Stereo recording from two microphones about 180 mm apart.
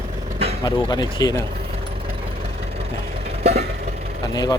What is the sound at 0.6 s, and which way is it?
Speech, 25° left (ahead or behind).